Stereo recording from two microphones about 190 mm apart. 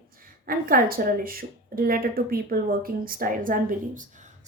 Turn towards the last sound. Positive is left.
turn(degrees=-45)  # may be behind; listen again after turning